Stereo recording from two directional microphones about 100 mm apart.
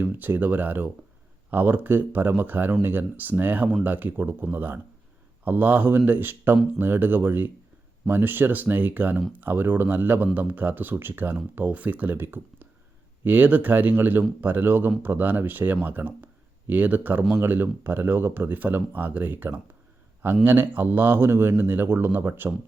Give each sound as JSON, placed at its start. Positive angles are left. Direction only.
{"t": 0.0, "sound": "speech", "side_deg": -20}